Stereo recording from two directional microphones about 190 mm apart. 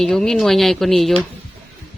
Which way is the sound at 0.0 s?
Centre (ahead or behind).